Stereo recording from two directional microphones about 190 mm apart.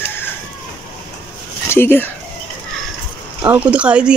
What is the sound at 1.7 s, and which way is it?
Speech, 10° left (ahead or behind).